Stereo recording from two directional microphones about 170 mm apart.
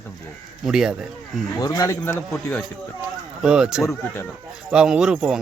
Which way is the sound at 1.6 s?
20° left (ahead or behind).